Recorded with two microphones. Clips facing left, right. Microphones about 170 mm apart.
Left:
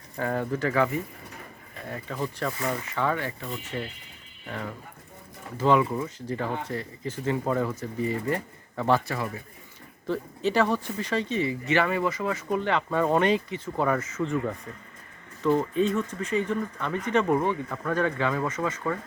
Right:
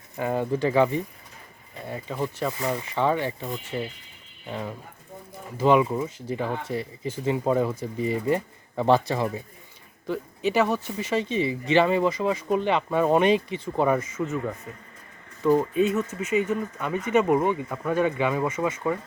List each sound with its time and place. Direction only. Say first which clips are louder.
0.2 s speech: right 3 dB; 15° right (ahead or behind)
1.9 s speech: right 2 dB; 15° right (ahead or behind)
11.3 s speech: right 2 dB; 25° right (ahead or behind)